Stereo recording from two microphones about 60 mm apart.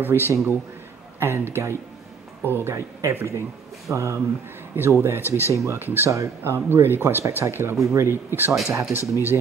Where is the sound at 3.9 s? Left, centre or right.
Right.